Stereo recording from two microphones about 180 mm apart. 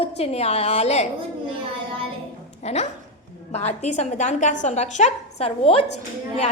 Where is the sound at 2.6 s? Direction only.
40° left (ahead or behind).